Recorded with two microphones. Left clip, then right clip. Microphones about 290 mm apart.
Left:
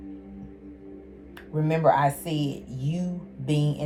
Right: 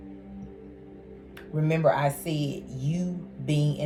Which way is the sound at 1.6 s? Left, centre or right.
Centre.